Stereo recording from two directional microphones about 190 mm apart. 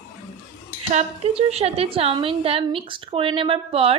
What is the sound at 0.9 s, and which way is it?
A woman's voice, 30° right (ahead or behind).